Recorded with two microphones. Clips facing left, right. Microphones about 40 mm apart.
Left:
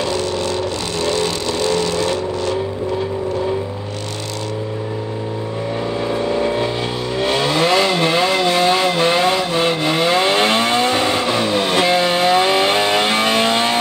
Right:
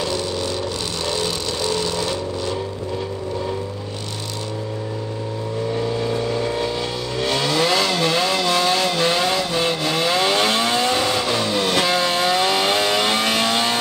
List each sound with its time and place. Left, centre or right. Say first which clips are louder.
2.0 s vehicle: left 5 dB; left
6.0 s vehicle: left 4 dB; left